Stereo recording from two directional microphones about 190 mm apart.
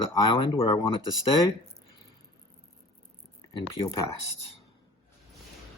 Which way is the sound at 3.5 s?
25° left (ahead or behind).